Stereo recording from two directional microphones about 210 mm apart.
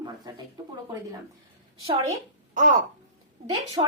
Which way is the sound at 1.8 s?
30° right (ahead or behind).